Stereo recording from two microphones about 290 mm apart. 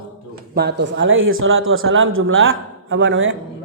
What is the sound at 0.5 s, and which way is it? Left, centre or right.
A man's voice, right.